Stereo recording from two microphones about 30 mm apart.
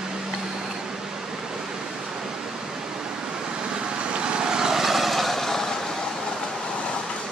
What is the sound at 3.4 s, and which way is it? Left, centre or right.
Vehicle, right.